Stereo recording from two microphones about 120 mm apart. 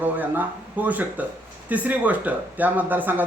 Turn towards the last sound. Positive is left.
turn(degrees=-15)  # may be behind; listen again after turning